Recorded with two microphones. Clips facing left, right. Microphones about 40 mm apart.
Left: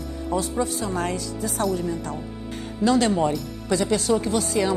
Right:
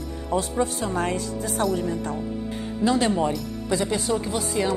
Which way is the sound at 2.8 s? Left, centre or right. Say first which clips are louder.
Left 2 dB; right.